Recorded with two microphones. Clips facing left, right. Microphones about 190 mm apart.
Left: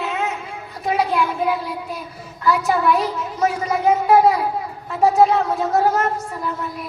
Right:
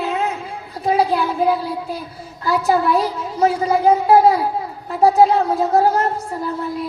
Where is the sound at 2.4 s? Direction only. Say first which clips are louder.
Right 1 dB; 30° right (ahead or behind).